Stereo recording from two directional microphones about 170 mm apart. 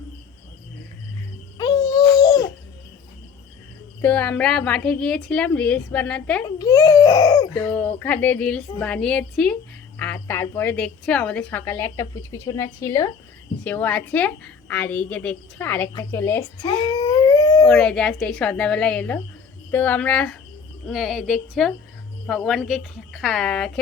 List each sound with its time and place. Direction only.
1.5 s babbling: 20° left (ahead or behind)
4.0 s a woman's voice: 10° left (ahead or behind)
6.4 s a child's voice: 20° left (ahead or behind)
7.5 s a woman's voice: 10° left (ahead or behind)
16.9 s howl: 20° left (ahead or behind)
17.7 s a woman's voice: 5° left (ahead or behind)